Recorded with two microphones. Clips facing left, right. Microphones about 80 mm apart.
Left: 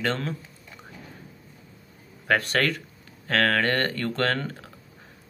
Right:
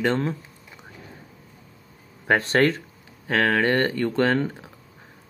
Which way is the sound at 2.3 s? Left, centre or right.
Right.